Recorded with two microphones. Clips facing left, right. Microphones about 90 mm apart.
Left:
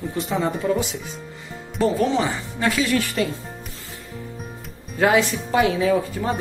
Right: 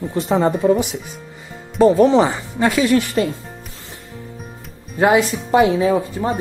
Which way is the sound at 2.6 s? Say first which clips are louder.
Right 6 dB; 25° right (ahead or behind).